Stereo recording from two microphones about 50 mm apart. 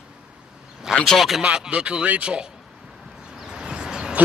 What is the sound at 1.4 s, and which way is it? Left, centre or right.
A man's voice, centre.